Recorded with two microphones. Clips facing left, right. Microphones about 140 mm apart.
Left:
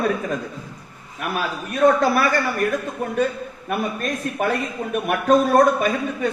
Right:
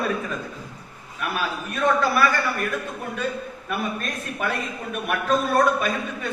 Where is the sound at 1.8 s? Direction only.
45° left (ahead or behind).